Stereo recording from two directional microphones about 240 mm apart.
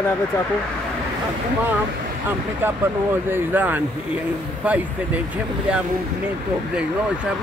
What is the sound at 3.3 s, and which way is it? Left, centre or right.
Speech, centre.